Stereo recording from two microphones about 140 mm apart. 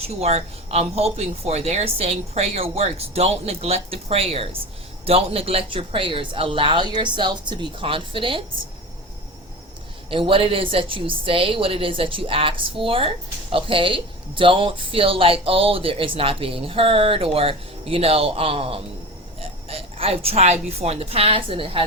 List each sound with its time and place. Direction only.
0.0 s speech: 50° right (ahead or behind)
10.1 s a woman's voice: 40° right (ahead or behind)